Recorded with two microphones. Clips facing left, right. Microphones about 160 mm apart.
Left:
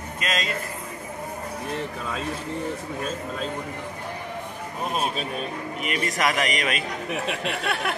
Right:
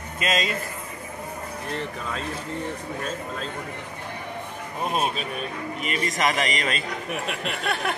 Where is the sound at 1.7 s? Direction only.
5° left (ahead or behind).